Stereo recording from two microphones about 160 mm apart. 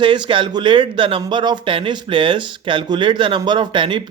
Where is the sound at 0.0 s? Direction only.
30° right (ahead or behind).